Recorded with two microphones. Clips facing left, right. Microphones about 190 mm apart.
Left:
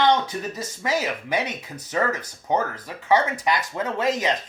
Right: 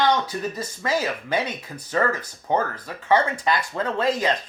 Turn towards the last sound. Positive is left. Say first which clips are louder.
# right 1 dB
turn(degrees=20)  # may be behind; listen again after turning